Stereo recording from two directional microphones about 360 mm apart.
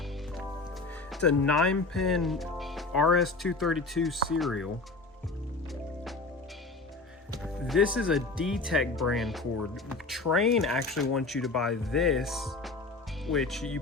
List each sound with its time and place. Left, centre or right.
1.1 s speech: centre
7.3 s music: centre
7.9 s speech: centre
9.9 s music: centre
10.3 s speech: centre